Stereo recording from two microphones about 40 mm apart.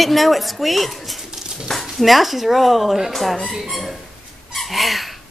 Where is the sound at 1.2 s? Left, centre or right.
Centre.